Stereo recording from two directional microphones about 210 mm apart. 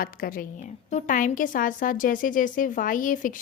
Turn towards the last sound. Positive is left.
turn(degrees=40)  # may be behind; listen again after turning